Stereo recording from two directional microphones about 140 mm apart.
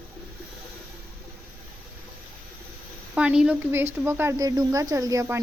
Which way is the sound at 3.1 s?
5° right (ahead or behind).